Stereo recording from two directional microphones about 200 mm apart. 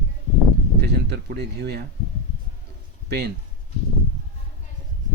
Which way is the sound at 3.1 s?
55° right (ahead or behind).